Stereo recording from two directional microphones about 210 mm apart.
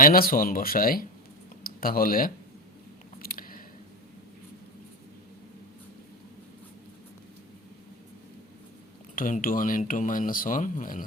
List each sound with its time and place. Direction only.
0.0 s speech: 45° left (ahead or behind)
3.2 s a sound: 45° left (ahead or behind)
9.1 s speech: 40° left (ahead or behind)